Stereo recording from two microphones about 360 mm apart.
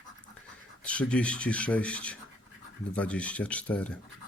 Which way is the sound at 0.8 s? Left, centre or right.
Centre.